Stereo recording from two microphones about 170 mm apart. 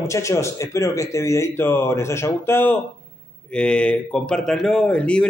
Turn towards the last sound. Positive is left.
turn(degrees=5)  # may be behind; listen again after turning